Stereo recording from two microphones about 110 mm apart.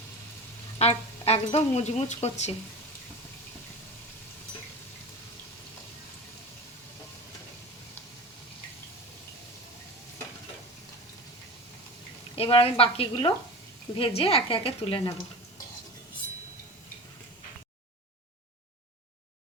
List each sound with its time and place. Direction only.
0.8 s speech: 70° left (ahead or behind); by 2.6 s 85° left
12.4 s a woman's voice: 60° left (ahead or behind)